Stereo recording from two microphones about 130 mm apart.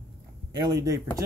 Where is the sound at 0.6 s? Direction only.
30° right (ahead or behind).